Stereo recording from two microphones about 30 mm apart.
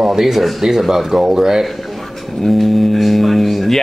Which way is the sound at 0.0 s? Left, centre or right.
Centre.